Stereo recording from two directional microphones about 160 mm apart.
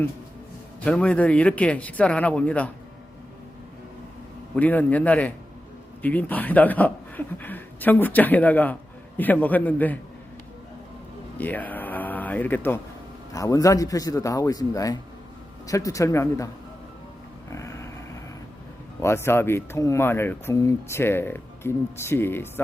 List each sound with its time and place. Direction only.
0.9 s speech: 5° left (ahead or behind)
4.5 s speech: 10° left (ahead or behind)
11.3 s a man's voice: 10° left (ahead or behind)
17.5 s a sound: 20° left (ahead or behind)
19.0 s speech: 15° left (ahead or behind)